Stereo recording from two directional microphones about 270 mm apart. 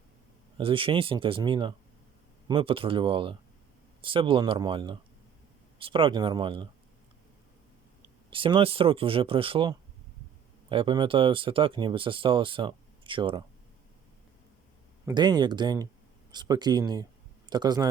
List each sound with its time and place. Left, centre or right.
0.6 s speech: centre
8.0 s speech: centre
15.0 s speech: centre